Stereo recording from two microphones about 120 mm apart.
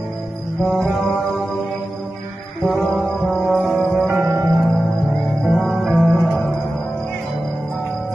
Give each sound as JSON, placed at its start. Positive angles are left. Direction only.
{"t": 0.7, "sound": "music", "side_deg": 0}
{"t": 2.7, "sound": "music", "side_deg": 0}
{"t": 4.1, "sound": "music", "side_deg": -20}
{"t": 4.5, "sound": "music", "side_deg": 0}